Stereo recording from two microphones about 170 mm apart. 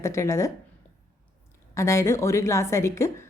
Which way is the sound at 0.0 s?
15° left (ahead or behind).